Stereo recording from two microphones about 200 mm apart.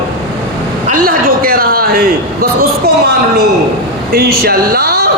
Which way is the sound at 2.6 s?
55° right (ahead or behind).